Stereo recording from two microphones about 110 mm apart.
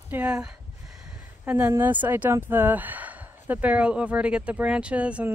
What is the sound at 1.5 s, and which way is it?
Speech, 15° right (ahead or behind).